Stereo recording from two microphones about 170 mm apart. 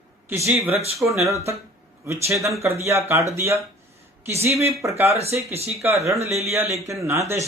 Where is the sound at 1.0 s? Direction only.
15° right (ahead or behind).